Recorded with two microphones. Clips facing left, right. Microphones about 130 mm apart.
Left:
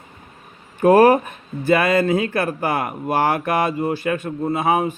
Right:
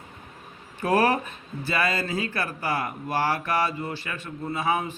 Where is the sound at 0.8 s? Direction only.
45° left (ahead or behind).